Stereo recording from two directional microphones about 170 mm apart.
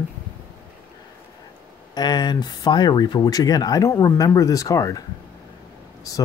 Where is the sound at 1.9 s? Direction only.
25° left (ahead or behind).